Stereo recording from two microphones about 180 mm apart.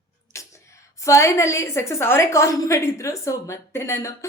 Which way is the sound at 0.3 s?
15° left (ahead or behind).